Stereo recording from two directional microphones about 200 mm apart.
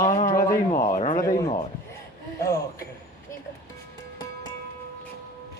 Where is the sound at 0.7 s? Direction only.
40° left (ahead or behind).